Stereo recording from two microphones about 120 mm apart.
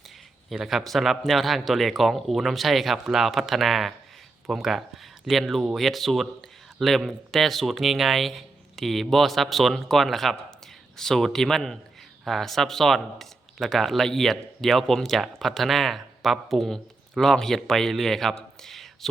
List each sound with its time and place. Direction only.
0.5 s speech: 5° right (ahead or behind)